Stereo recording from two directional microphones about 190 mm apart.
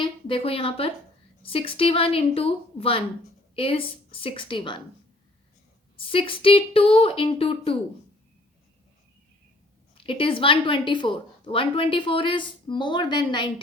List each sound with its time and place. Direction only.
0.0 s a woman's voice: 30° left (ahead or behind)
6.1 s a woman's voice: 25° left (ahead or behind)
9.9 s a woman's voice: 30° left (ahead or behind)